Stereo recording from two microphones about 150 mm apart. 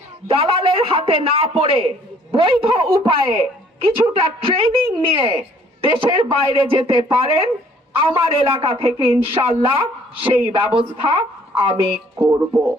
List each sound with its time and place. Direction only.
0.3 s a woman's voice: 35° right (ahead or behind)
4.2 s a woman's voice: 35° right (ahead or behind)
12.2 s speech: 15° right (ahead or behind)